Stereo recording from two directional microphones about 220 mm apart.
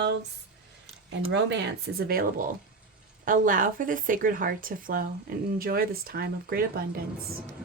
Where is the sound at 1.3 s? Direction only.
55° right (ahead or behind).